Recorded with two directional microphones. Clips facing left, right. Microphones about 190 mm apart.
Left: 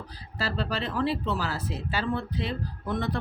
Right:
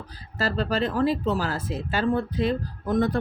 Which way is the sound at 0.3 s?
45° right (ahead or behind).